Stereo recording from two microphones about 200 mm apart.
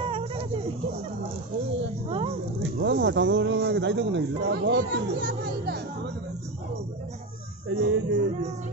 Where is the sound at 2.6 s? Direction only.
65° right (ahead or behind).